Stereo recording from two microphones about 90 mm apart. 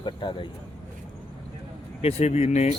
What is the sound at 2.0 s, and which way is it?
Speech, 90° left.